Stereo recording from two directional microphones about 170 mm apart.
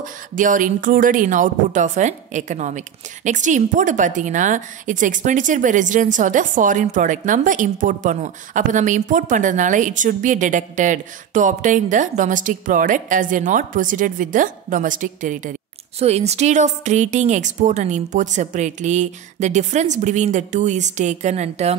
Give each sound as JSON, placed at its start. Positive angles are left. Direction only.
{"t": 0.0, "sound": "a woman's voice", "side_deg": -50}
{"t": 16.0, "sound": "a woman's voice", "side_deg": -40}